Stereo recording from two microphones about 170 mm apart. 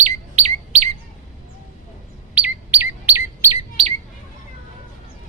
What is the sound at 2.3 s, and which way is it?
Chirp, 10° right (ahead or behind).